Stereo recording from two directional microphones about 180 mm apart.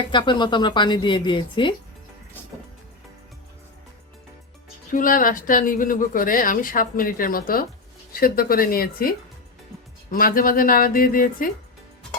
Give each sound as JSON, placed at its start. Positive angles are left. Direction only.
{"t": 0.1, "sound": "speech", "side_deg": 25}
{"t": 4.9, "sound": "speech", "side_deg": 50}